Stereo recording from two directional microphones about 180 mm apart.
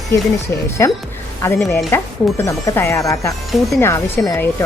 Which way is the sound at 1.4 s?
15° left (ahead or behind).